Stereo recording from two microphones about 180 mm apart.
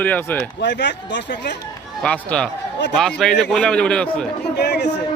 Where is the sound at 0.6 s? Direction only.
75° left (ahead or behind).